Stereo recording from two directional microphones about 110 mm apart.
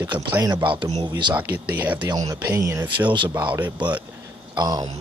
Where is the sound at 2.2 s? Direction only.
30° right (ahead or behind).